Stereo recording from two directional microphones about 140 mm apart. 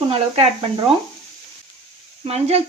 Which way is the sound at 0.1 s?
45° right (ahead or behind).